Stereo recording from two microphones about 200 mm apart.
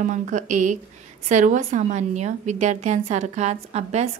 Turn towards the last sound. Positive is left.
turn(degrees=-35)  # may be behind; listen again after turning